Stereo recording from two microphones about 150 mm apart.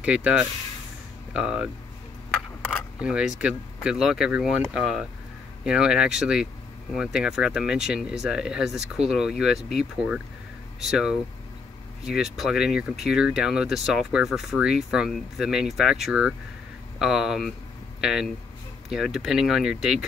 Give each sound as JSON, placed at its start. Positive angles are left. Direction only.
{"t": 0.0, "sound": "speech", "side_deg": -5}
{"t": 3.0, "sound": "speech", "side_deg": -5}